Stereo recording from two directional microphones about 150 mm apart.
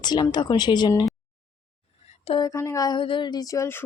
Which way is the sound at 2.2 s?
35° left (ahead or behind).